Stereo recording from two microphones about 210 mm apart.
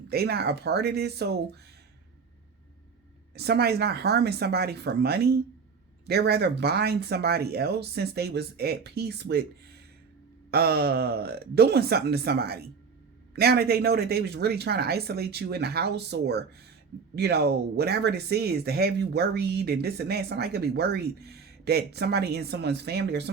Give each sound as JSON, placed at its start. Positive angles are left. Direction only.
{"t": 0.1, "sound": "speech", "side_deg": -50}
{"t": 3.3, "sound": "speech", "side_deg": -50}
{"t": 10.5, "sound": "speech", "side_deg": -50}